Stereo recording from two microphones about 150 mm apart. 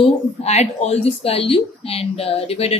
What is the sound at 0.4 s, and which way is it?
Speech, 45° left (ahead or behind).